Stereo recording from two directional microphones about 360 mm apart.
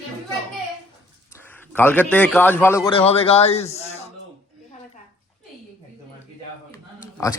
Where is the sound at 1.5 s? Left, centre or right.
Centre.